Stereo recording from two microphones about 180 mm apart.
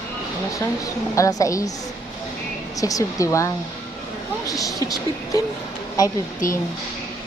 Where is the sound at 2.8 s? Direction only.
20° left (ahead or behind).